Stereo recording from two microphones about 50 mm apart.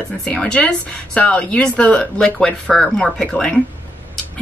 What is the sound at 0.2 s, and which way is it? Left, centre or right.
Speech, left.